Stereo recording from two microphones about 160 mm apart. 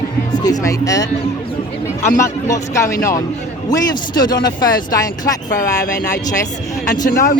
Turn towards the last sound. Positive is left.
turn(degrees=60)  # may be behind; listen again after turning